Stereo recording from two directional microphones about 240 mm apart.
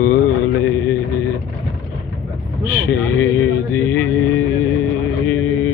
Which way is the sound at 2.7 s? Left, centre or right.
Centre.